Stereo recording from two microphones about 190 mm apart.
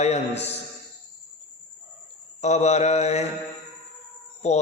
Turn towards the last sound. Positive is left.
turn(degrees=35)  # may be behind; listen again after turning